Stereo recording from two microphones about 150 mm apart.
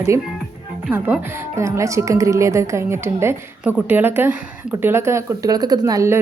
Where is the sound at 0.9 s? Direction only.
10° right (ahead or behind).